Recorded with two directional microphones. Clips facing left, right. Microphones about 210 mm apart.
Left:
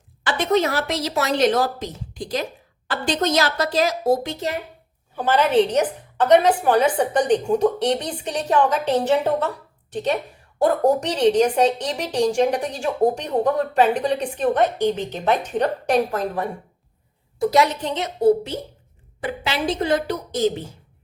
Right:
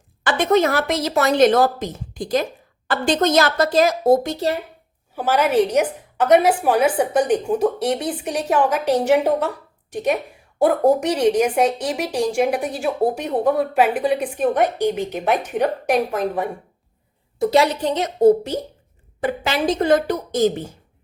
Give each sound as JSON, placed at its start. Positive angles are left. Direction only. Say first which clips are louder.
{"t": 0.3, "sound": "a woman's voice", "louder": "right 3 dB", "side_deg": -50}
{"t": 5.1, "sound": "a woman's voice", "louder": "even", "side_deg": -10}
{"t": 17.4, "sound": "a woman's voice", "louder": "right 2 dB", "side_deg": -30}